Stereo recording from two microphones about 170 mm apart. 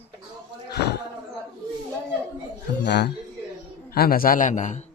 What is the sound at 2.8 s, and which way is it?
Speech, 85° left.